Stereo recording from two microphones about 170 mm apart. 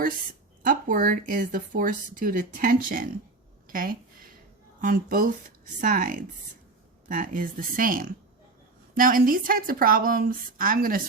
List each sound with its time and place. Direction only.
0.6 s a woman's voice: 55° right (ahead or behind)